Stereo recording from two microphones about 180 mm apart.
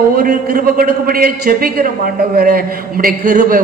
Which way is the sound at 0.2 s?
50° right (ahead or behind).